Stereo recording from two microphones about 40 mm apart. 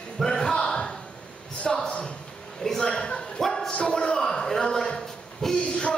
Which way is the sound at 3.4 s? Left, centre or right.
Centre.